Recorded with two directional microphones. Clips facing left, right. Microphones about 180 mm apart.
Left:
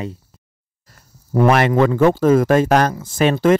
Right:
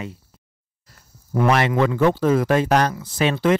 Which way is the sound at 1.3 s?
50° left (ahead or behind).